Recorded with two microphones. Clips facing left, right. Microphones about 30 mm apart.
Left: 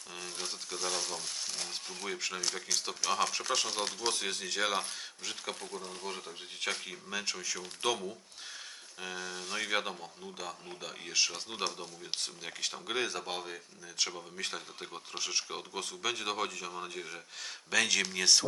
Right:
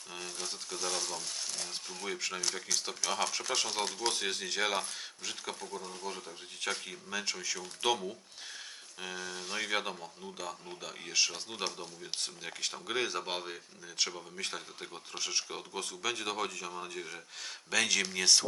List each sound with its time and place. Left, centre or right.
0.4 s speech: centre
5.8 s speech: left
6.1 s speech: centre
14.0 s speech: centre